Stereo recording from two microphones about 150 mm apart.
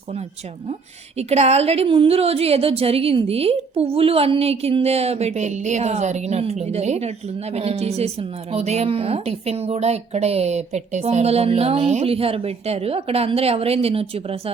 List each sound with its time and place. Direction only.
1.3 s speech: 45° right (ahead or behind)